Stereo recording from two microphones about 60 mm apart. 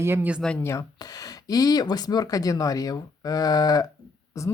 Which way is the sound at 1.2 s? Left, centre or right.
Left.